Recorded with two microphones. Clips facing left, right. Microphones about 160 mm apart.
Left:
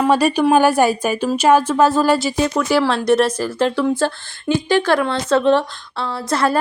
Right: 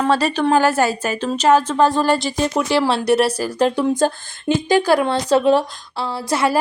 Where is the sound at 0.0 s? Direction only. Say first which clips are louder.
Left 3 dB; 10° left (ahead or behind).